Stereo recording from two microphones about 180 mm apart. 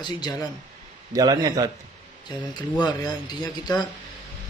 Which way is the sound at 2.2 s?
25° left (ahead or behind).